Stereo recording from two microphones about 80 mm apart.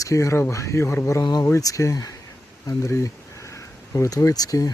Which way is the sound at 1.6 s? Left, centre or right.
Left.